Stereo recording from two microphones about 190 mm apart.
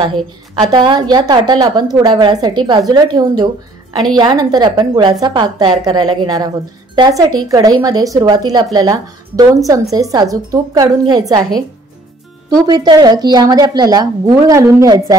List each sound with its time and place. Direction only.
0.6 s a woman's voice: 25° right (ahead or behind)
12.6 s a woman's voice: 20° right (ahead or behind)